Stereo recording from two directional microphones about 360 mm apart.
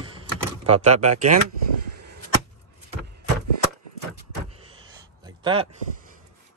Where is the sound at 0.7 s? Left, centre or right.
Right.